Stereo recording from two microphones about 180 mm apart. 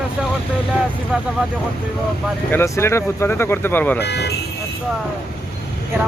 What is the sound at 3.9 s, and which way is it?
Speech, 70° left (ahead or behind).